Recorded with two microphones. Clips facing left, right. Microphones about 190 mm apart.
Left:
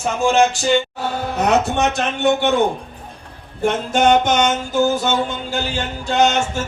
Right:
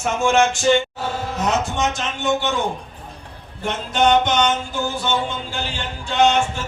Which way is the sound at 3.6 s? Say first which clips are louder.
Left 3 dB; 45° left (ahead or behind).